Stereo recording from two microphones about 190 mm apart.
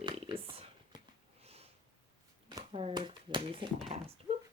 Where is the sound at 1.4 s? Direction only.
30° right (ahead or behind).